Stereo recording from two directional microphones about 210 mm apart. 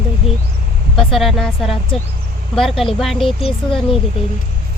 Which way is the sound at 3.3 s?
25° left (ahead or behind).